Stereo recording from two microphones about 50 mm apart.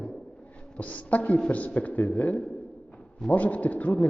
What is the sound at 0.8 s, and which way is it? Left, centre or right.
A man's voice, left.